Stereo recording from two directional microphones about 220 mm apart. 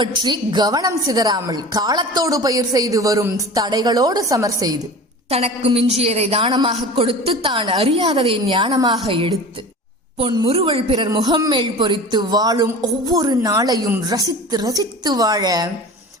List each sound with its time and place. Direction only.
0.0 s a woman's voice: 20° right (ahead or behind)
5.3 s a woman's voice: 25° right (ahead or behind)